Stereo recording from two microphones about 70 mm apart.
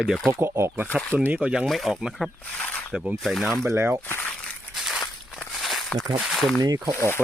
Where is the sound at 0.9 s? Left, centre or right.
Centre.